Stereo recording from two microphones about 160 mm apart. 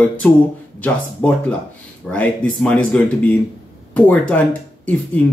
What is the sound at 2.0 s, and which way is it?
A man's voice, 5° left (ahead or behind).